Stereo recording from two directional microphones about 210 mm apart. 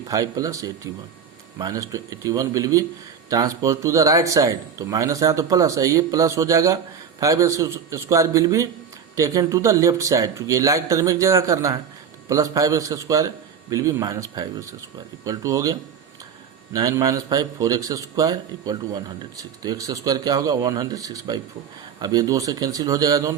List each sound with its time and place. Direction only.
0.1 s a man's voice: 15° right (ahead or behind)